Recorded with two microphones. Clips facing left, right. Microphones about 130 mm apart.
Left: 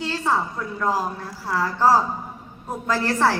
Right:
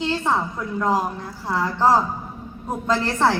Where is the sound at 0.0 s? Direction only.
15° right (ahead or behind).